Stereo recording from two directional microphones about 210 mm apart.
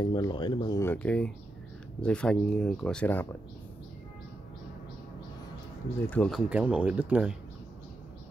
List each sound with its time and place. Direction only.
0.0 s speech: 20° left (ahead or behind)
6.0 s speech: 5° left (ahead or behind)